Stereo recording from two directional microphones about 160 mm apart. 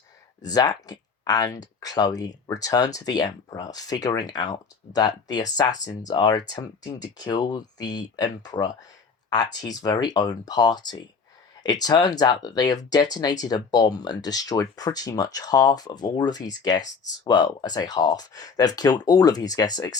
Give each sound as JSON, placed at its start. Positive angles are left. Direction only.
{"t": 0.4, "sound": "speech", "side_deg": 25}